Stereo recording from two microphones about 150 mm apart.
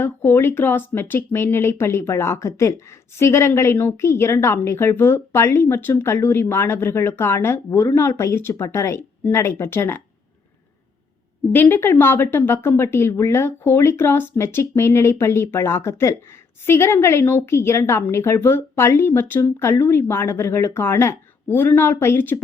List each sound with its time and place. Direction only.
0.0 s a woman's voice: 15° left (ahead or behind)
11.5 s a woman's voice: 15° left (ahead or behind)